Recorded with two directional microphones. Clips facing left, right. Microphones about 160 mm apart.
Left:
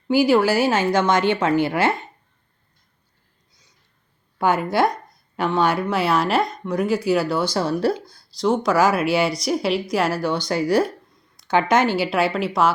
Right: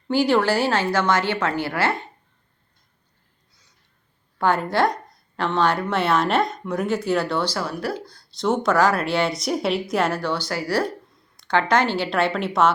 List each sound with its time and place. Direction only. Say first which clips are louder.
0.1 s a woman's voice: left 2 dB; 5° left (ahead or behind)
4.4 s a woman's voice: left 1 dB; 10° left (ahead or behind)
7.5 s speech: left 6 dB; 25° left (ahead or behind)
8.4 s a woman's voice: left 1 dB; centre (ahead or behind)